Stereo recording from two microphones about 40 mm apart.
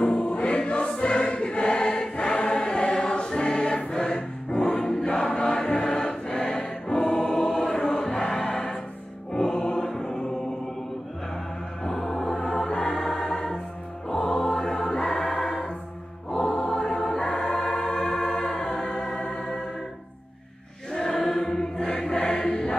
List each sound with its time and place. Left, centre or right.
0.0 s choir: left
5.9 s music: left
7.9 s choir: centre
9.3 s music: centre
9.8 s mantra: centre
11.8 s music: centre
12.4 s music: left
14.4 s choir: centre
16.4 s music: centre
17.2 s music: left
20.9 s choir: centre